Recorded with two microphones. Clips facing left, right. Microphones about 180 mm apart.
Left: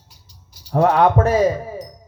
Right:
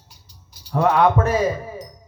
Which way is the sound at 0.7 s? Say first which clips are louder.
Left 2 dB; 35° left (ahead or behind).